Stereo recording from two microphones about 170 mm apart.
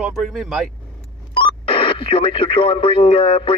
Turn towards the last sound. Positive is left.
turn(degrees=30)  # may be behind; listen again after turning